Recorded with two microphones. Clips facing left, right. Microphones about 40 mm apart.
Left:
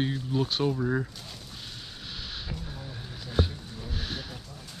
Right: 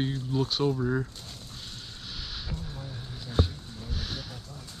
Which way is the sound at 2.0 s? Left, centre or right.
Centre.